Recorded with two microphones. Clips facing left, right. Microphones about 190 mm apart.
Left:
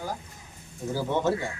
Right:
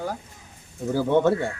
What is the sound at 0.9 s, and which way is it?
Speech, 55° right (ahead or behind).